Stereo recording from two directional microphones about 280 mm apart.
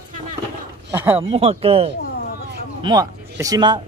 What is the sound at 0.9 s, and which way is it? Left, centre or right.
Speech, centre.